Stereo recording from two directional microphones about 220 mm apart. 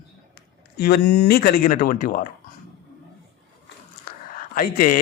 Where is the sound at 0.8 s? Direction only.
45° left (ahead or behind).